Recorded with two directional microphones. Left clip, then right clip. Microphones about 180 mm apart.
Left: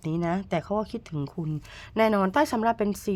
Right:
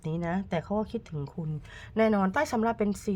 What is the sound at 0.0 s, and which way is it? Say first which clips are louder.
Speech: left 4 dB; 30° left (ahead or behind).